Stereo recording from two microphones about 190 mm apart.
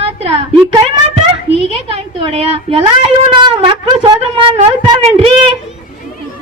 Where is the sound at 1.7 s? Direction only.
30° right (ahead or behind).